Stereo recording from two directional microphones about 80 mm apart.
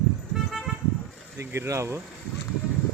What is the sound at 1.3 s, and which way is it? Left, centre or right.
Speech, right.